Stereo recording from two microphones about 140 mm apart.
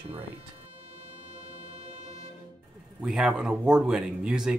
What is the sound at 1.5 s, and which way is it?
Music, 50° right (ahead or behind).